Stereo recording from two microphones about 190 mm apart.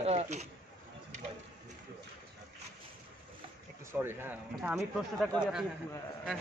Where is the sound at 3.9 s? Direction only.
10° right (ahead or behind).